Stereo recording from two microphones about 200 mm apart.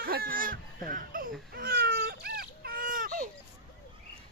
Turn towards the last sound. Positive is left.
turn(degrees=-45)  # may be behind; listen again after turning